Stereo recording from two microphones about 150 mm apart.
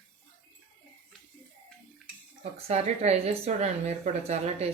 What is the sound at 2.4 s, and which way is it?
Speech, 45° right (ahead or behind).